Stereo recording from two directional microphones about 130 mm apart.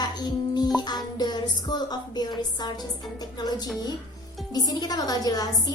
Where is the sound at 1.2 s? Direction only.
30° left (ahead or behind).